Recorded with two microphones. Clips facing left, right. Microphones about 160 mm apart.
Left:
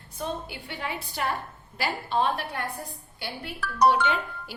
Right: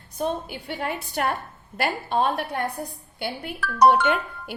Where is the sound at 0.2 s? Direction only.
50° right (ahead or behind).